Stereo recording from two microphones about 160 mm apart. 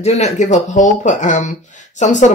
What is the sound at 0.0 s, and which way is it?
Speech, 45° left (ahead or behind).